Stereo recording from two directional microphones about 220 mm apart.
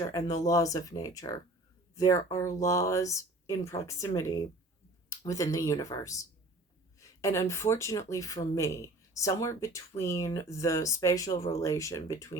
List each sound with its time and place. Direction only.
0.0 s speech: 15° left (ahead or behind)